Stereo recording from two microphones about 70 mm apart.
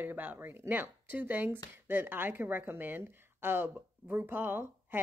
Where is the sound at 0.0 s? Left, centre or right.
Right.